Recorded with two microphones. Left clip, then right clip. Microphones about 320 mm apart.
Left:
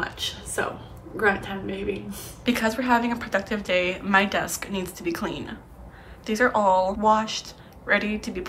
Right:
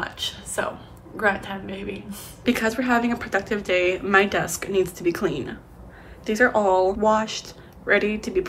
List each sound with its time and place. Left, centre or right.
0.0 s a woman's voice: centre